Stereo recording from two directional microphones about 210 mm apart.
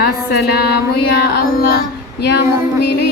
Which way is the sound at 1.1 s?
50° left (ahead or behind).